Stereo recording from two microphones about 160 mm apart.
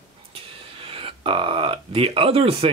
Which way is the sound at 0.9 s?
35° right (ahead or behind).